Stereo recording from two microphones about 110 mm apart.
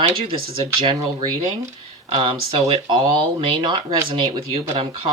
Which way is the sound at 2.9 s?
45° right (ahead or behind).